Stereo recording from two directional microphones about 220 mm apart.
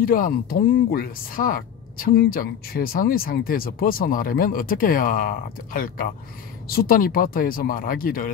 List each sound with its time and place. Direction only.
0.0 s speech: 40° left (ahead or behind)